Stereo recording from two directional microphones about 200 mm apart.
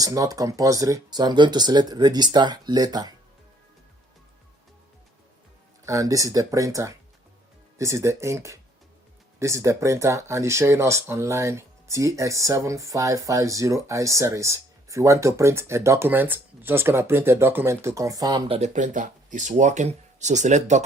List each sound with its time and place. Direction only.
0.0 s speech: 15° right (ahead or behind)
5.8 s speech: 15° right (ahead or behind); by 20.8 s 35° right (ahead or behind)